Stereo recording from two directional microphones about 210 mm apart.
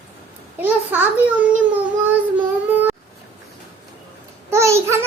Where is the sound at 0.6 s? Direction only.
10° right (ahead or behind).